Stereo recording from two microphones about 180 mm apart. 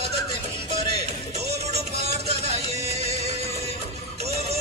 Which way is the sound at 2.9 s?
35° right (ahead or behind).